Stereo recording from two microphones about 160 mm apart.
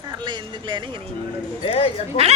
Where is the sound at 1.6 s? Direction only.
35° left (ahead or behind).